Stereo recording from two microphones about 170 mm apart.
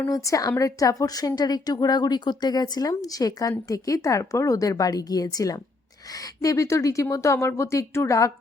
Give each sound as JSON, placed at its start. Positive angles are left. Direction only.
{"t": 0.0, "sound": "a woman's voice", "side_deg": 20}